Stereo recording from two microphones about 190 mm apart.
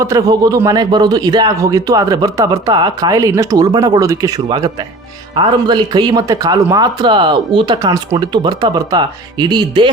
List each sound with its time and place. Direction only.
0.0 s a man's voice: 20° right (ahead or behind)